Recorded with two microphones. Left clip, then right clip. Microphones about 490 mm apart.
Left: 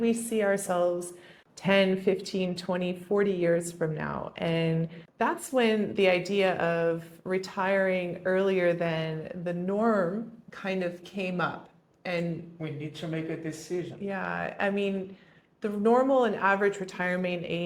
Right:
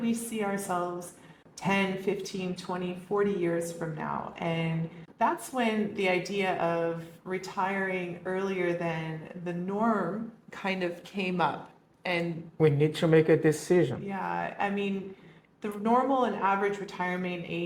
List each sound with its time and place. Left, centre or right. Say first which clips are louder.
0.0 s speech: left 5 dB; left
10.6 s speech: even; centre
12.6 s speech: right 14 dB; right
14.1 s speech: even; left